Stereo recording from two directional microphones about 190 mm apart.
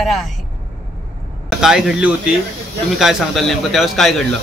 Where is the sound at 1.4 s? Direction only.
Centre (ahead or behind).